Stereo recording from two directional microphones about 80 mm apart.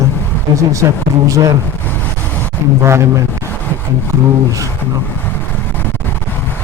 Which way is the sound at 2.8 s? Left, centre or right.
Right.